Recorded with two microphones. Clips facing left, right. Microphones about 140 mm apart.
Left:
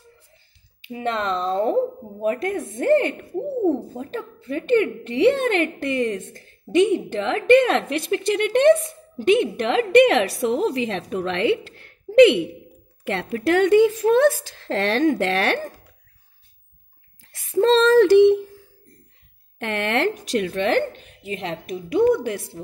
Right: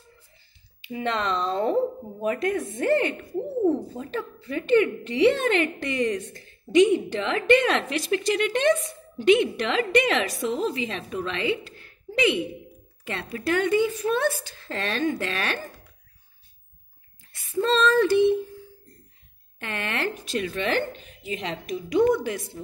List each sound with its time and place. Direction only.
0.8 s a woman's voice: 45° left (ahead or behind)
3.3 s hoot: 25° left (ahead or behind)
3.9 s a woman's voice: 50° left (ahead or behind)
9.2 s a woman's voice: 50° left (ahead or behind); by 12.4 s 75° left (ahead or behind)
13.0 s speech: 85° left
17.2 s speech: 90° left
19.6 s a woman's voice: 75° left (ahead or behind); by 22.5 s 60° left (ahead or behind)